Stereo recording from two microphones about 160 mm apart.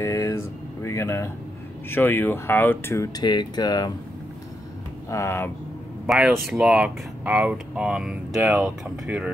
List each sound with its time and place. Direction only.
0.0 s air conditioning: 20° left (ahead or behind)
1.9 s speech: 15° left (ahead or behind)
5.1 s speech: 15° left (ahead or behind)
6.0 s speech: 5° right (ahead or behind)